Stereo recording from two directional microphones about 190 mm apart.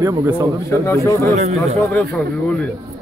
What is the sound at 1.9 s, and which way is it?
Speech, 5° left (ahead or behind).